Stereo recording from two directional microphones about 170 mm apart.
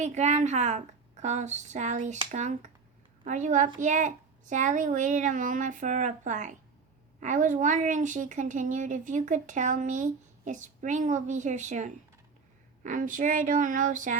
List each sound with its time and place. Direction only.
0.0 s a woman's voice: 40° right (ahead or behind)